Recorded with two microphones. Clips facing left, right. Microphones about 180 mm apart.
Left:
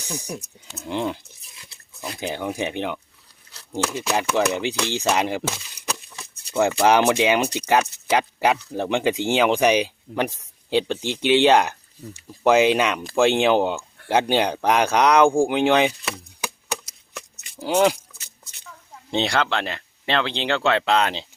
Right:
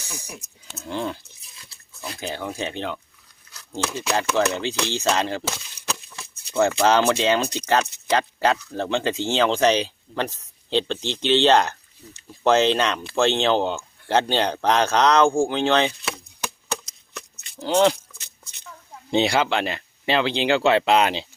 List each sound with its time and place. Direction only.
0.0 s speech: 15° left (ahead or behind)
3.5 s a sound: 30° left (ahead or behind)
4.4 s speech: 15° left (ahead or behind)
16.4 s chop: 5° left (ahead or behind)
19.1 s speech: 5° right (ahead or behind)